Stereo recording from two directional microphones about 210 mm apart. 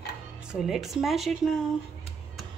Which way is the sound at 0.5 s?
Centre (ahead or behind).